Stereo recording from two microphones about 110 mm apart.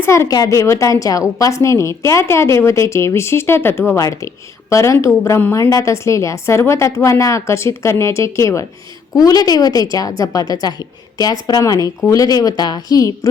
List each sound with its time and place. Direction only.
0.0 s a woman's voice: 25° left (ahead or behind)